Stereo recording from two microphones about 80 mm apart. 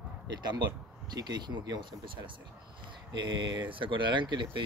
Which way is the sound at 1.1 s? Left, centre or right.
Right.